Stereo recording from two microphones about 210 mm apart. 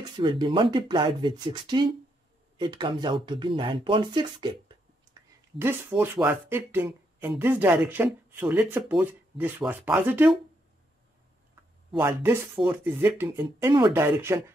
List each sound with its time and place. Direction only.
0.2 s speech: 25° right (ahead or behind)
5.6 s speech: 10° right (ahead or behind)
12.0 s speech: 10° right (ahead or behind)